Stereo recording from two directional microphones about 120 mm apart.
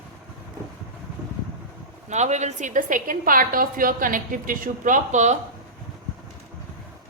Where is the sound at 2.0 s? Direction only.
75° right (ahead or behind); by 3.0 s 90° right.